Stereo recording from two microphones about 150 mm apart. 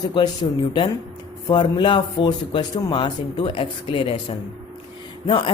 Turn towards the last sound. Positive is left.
turn(degrees=35)  # may be behind; listen again after turning